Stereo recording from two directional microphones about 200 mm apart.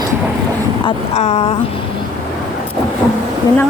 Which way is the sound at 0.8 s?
30° left (ahead or behind).